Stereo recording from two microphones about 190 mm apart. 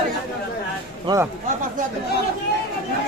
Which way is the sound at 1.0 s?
15° right (ahead or behind).